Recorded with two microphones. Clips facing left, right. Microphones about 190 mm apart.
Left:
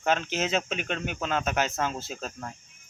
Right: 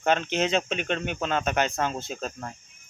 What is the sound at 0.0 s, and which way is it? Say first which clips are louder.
Speech: right 3 dB; 5° left (ahead or behind).